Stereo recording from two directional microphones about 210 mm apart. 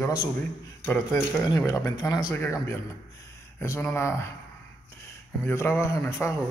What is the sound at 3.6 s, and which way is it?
Speech, 15° left (ahead or behind).